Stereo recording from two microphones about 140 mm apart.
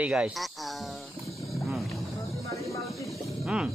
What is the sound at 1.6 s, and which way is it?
Vehicle, centre (ahead or behind).